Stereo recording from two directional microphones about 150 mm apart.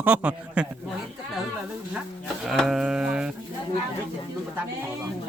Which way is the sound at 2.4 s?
Centre (ahead or behind).